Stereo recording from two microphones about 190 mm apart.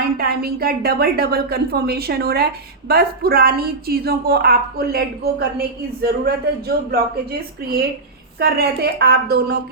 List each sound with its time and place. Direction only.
0.2 s a woman's voice: 55° right (ahead or behind)